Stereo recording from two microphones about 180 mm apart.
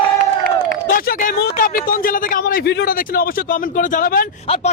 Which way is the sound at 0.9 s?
55° left (ahead or behind).